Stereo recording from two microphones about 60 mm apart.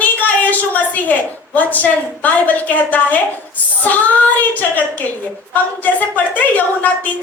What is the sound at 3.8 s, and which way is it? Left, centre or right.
Child singing, left.